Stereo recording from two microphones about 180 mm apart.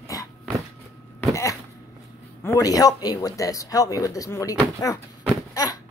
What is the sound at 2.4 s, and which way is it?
Speech, 20° left (ahead or behind).